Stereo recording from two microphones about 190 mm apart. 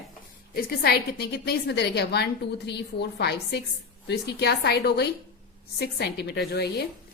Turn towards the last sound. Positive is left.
turn(degrees=60)  # may be behind; listen again after turning